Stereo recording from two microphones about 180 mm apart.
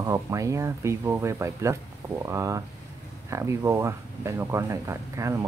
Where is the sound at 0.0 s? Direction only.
15° right (ahead or behind).